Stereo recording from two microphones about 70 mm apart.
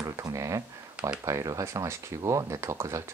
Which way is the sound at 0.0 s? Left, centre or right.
Right.